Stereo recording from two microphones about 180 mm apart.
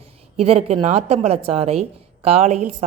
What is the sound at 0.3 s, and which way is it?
A woman's voice, 35° right (ahead or behind).